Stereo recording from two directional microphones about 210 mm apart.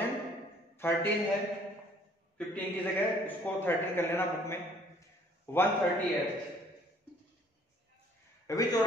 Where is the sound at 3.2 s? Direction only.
10° left (ahead or behind).